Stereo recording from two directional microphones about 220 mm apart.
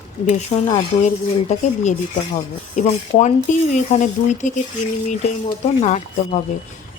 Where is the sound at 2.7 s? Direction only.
35° left (ahead or behind).